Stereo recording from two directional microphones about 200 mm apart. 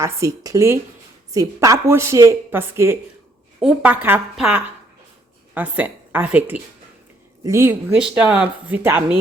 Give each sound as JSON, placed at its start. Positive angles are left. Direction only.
{"t": 0.0, "sound": "speech", "side_deg": -15}